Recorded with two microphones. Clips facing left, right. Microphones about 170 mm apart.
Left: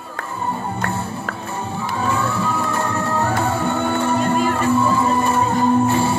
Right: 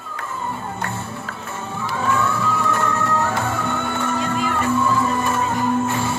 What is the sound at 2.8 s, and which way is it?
Music, 30° left (ahead or behind).